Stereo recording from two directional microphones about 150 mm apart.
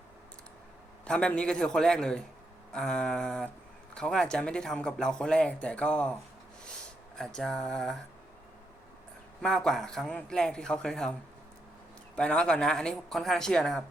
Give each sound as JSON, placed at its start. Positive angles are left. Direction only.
{"t": 1.0, "sound": "speech", "side_deg": 5}
{"t": 7.2, "sound": "speech", "side_deg": 5}
{"t": 9.4, "sound": "speech", "side_deg": 5}
{"t": 12.1, "sound": "speech", "side_deg": 5}